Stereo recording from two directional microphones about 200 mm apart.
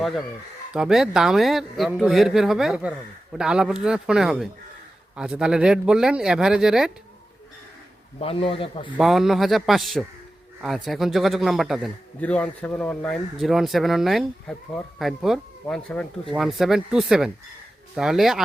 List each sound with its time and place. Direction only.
0.0 s a man's voice: centre (ahead or behind)
8.2 s a man's voice: 25° left (ahead or behind)
9.0 s a man's voice: centre (ahead or behind)